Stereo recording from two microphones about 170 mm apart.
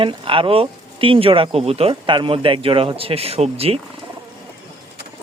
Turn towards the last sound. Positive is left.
turn(degrees=-35)  # may be behind; listen again after turning